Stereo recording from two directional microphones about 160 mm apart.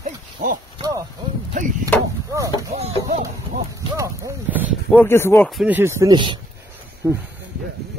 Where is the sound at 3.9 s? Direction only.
20° right (ahead or behind).